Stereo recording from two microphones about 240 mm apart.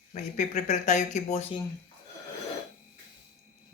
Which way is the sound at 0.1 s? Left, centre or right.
Left.